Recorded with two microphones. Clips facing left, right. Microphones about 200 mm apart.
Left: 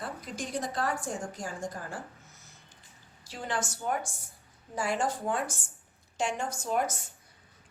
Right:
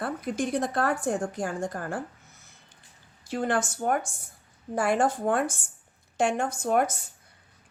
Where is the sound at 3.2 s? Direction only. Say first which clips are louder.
Right 8 dB; 55° right (ahead or behind).